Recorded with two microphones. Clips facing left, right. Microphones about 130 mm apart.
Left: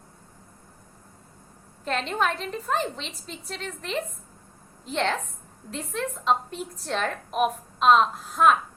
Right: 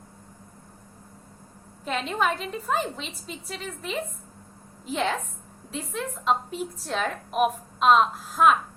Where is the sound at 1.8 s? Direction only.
5° right (ahead or behind).